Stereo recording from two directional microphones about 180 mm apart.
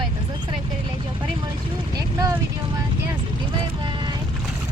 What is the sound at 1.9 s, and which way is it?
Speech, 20° right (ahead or behind).